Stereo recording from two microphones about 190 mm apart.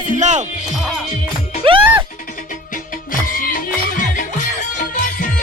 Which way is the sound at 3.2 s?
45° left (ahead or behind).